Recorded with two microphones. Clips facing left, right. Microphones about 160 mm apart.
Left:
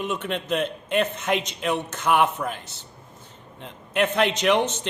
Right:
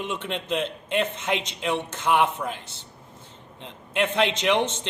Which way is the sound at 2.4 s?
50° left (ahead or behind).